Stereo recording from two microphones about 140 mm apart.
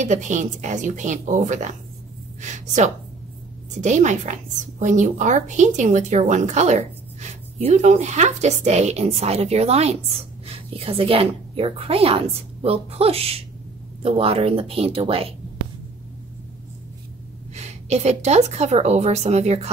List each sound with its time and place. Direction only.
0.0 s a woman's voice: 60° right (ahead or behind); by 15.3 s 45° right (ahead or behind)
17.6 s a woman's voice: 50° right (ahead or behind)